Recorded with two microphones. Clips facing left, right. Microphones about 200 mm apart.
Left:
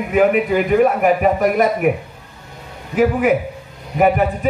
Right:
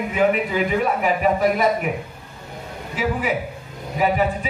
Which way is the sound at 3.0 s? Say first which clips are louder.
Left 8 dB; 55° left (ahead or behind).